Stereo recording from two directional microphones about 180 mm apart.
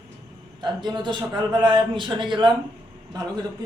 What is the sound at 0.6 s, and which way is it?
A man's voice, 25° right (ahead or behind).